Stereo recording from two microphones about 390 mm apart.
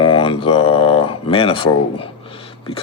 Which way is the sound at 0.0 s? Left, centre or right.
Centre.